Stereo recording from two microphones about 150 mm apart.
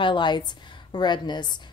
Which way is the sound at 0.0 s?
30° left (ahead or behind).